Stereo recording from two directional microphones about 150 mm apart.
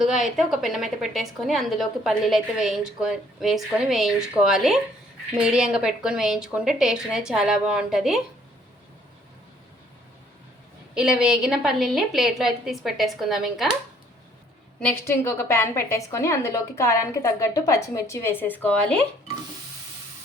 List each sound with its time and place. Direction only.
0.0 s a woman's voice: centre (ahead or behind)
10.9 s a woman's voice: 5° right (ahead or behind)
14.8 s a woman's voice: 15° left (ahead or behind)